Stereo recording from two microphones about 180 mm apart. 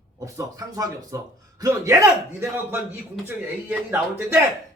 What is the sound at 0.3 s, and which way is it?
A man's voice, 20° right (ahead or behind).